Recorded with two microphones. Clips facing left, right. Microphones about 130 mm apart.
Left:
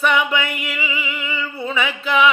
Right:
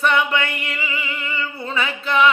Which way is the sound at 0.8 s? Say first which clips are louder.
Left 1 dB; 10° left (ahead or behind).